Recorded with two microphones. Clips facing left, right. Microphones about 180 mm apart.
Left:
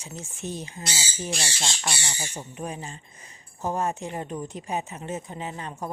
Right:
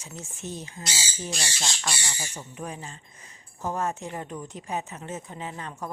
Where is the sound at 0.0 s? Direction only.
15° left (ahead or behind).